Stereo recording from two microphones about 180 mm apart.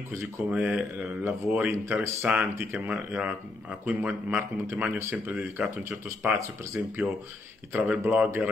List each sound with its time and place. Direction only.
0.5 s speech: 5° right (ahead or behind)
6.4 s speech: 15° right (ahead or behind)